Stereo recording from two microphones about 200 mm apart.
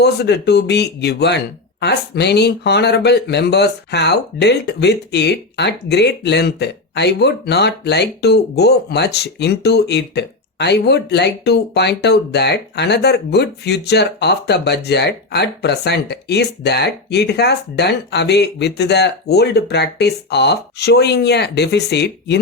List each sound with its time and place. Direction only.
0.0 s speech: 55° left (ahead or behind)